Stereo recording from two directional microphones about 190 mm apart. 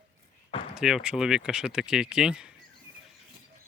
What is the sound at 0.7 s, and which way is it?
Speech, 5° right (ahead or behind).